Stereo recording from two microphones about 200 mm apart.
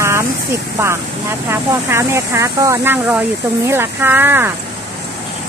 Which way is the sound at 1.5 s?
15° right (ahead or behind).